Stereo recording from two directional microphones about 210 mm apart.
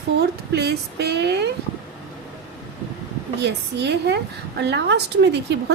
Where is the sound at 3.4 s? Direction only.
55° right (ahead or behind).